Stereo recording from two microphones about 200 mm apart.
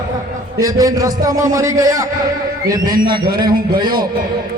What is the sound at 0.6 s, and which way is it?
A man's voice, 15° right (ahead or behind).